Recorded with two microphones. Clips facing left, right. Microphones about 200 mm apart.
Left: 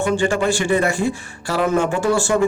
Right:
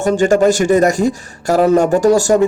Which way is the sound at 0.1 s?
45° right (ahead or behind).